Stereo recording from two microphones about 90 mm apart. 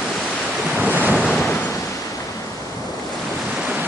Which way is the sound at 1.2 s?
Centre (ahead or behind).